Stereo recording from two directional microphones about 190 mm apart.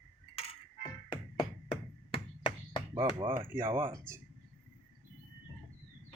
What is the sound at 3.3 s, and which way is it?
Speech, 15° right (ahead or behind).